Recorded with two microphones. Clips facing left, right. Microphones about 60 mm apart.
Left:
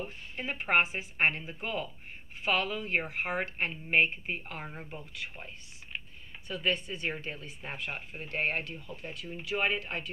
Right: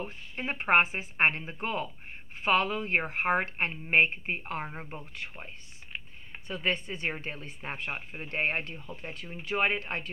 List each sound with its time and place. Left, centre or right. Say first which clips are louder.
0.0 s speech: right 2 dB; right
6.3 s speech: right 1 dB; right